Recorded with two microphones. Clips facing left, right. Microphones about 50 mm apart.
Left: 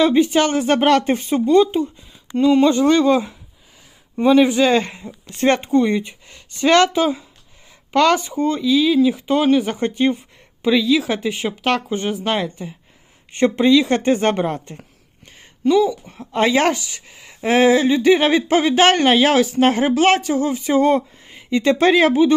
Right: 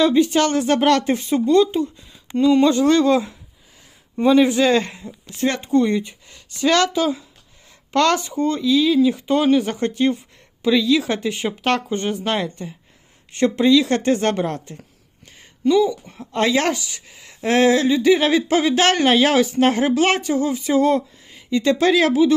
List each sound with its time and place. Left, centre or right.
0.0 s speech: left
4.7 s speech: left
5.7 s speech: left
7.9 s speech: centre
9.7 s a woman's voice: left; by 12.7 s centre
13.3 s speech: left
15.6 s speech: centre
16.0 s a woman's voice: centre
18.9 s a woman's voice: centre
20.2 s speech: left